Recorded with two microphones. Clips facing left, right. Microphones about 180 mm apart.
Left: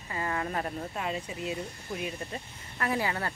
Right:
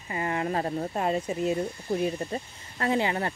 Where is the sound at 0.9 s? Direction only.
40° right (ahead or behind); by 3.3 s 25° right (ahead or behind).